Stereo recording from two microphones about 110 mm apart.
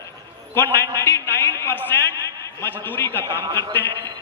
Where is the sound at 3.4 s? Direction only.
35° right (ahead or behind).